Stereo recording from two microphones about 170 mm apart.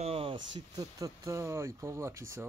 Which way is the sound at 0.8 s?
20° right (ahead or behind).